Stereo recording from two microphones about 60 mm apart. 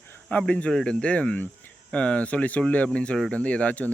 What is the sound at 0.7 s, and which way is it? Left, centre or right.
Speech, centre.